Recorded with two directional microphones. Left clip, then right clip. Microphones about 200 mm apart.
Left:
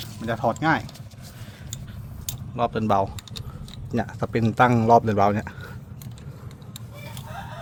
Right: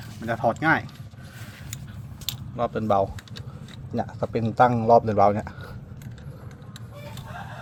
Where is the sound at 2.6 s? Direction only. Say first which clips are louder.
Left 1 dB; 25° left (ahead or behind).